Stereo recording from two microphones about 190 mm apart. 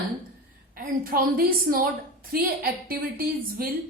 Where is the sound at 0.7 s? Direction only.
50° right (ahead or behind).